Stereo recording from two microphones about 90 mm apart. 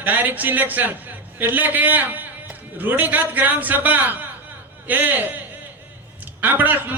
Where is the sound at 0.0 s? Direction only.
20° right (ahead or behind).